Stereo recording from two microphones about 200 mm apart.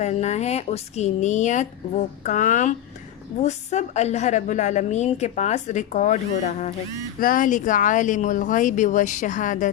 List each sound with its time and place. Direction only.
0.0 s a woman's voice: 35° left (ahead or behind)